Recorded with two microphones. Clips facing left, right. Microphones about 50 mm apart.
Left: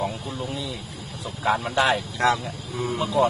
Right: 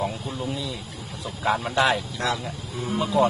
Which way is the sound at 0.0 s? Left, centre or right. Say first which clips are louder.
Even; centre.